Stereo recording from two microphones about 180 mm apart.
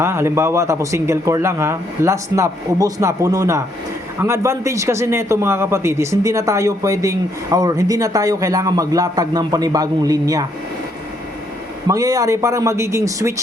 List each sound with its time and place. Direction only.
0.0 s a man's voice: 15° right (ahead or behind)
11.9 s a man's voice: 20° right (ahead or behind)